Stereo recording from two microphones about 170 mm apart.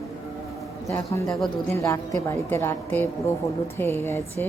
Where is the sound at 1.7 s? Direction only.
15° left (ahead or behind).